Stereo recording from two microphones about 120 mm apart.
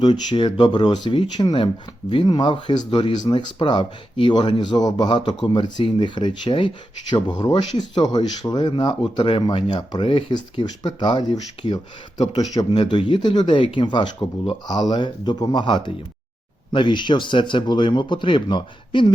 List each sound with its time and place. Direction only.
0.0 s speech: 40° left (ahead or behind)